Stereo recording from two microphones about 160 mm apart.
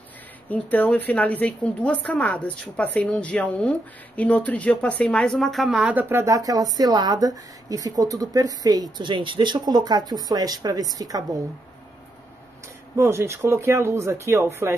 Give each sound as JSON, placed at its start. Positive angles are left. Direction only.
{"t": 0.5, "sound": "a woman's voice", "side_deg": 10}
{"t": 12.9, "sound": "speech", "side_deg": -15}